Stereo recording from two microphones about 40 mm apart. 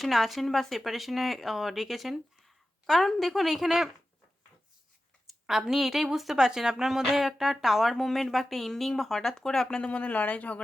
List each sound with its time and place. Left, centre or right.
0.0 s speech: centre
5.2 s speech: centre
9.9 s speech: left